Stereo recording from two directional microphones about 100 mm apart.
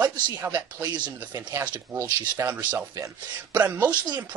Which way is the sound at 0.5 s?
40° right (ahead or behind).